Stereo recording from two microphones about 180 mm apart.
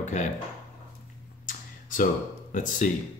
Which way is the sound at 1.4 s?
50° left (ahead or behind).